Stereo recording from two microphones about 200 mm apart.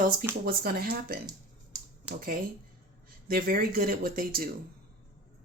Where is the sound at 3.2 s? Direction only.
45° right (ahead or behind).